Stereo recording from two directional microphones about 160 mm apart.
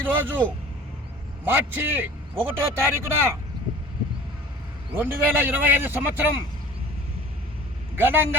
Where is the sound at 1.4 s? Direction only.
10° right (ahead or behind).